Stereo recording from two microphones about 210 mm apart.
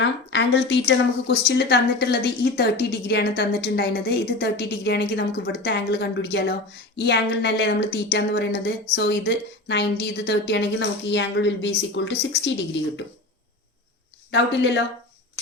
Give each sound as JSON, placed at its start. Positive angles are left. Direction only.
{"t": 0.0, "sound": "a woman's voice", "side_deg": 60}
{"t": 14.3, "sound": "a woman's voice", "side_deg": 55}